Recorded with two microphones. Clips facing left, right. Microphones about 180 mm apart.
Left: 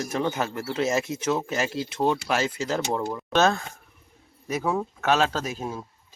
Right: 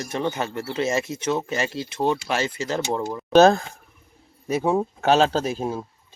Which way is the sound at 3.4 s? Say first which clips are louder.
Right 8 dB; 35° right (ahead or behind).